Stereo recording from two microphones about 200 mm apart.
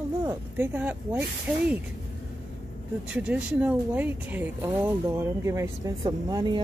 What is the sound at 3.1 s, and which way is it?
Speech, 5° right (ahead or behind).